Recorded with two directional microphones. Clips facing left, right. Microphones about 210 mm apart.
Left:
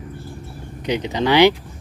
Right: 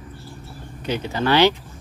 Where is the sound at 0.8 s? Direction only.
15° left (ahead or behind).